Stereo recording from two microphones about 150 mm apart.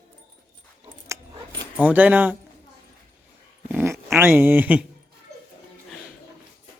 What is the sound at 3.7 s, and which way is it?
Dog, 15° right (ahead or behind).